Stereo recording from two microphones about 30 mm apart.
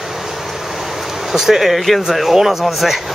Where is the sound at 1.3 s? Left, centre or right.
Centre.